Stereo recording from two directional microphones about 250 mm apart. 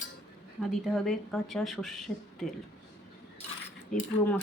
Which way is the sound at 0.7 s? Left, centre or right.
Centre.